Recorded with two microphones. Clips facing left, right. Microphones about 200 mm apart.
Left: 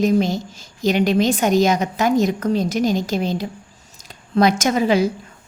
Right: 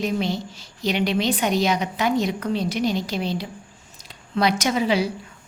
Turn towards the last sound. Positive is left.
turn(degrees=45)  # may be behind; listen again after turning